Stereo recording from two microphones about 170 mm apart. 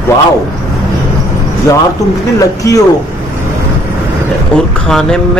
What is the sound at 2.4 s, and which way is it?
Speech, 20° left (ahead or behind).